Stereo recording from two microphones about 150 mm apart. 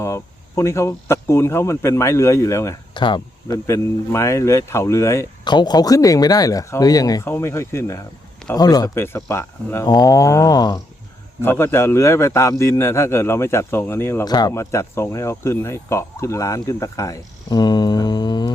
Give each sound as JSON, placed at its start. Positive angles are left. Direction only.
{"t": 0.0, "sound": "speech", "side_deg": 20}
{"t": 2.9, "sound": "speech", "side_deg": 30}
{"t": 3.7, "sound": "speech", "side_deg": 20}
{"t": 5.5, "sound": "a man's voice", "side_deg": 30}